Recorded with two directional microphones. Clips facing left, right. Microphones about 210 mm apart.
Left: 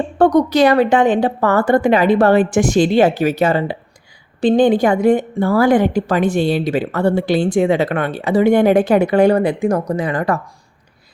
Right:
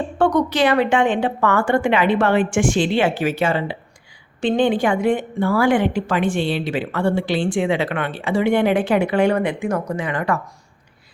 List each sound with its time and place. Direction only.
0.2 s speech: 40° left (ahead or behind)